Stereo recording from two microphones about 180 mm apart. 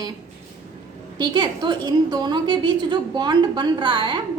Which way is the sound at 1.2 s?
25° right (ahead or behind).